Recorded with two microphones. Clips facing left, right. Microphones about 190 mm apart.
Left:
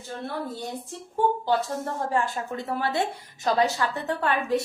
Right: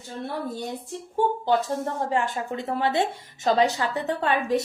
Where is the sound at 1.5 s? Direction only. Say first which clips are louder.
Right 2 dB; 20° right (ahead or behind).